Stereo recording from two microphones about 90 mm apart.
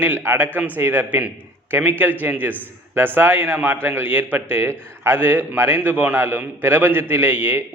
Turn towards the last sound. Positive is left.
turn(degrees=-25)  # may be behind; listen again after turning